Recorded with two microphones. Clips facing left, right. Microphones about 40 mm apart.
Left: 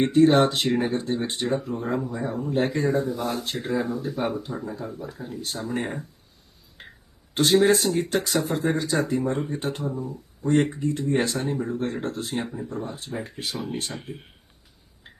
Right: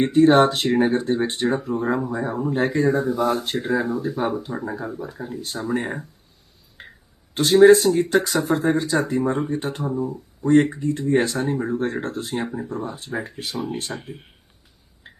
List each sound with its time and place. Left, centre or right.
0.0 s speech: centre
0.5 s speech: right
0.8 s speech: centre
3.2 s speech: centre
3.6 s speech: centre
7.3 s speech: centre
9.8 s speech: centre
10.4 s speech: centre
11.9 s speech: centre
12.2 s speech: centre
13.1 s speech: centre